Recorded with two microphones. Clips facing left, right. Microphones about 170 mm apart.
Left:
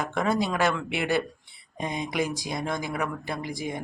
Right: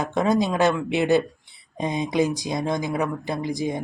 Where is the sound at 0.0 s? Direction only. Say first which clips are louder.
Right 5 dB; 20° right (ahead or behind).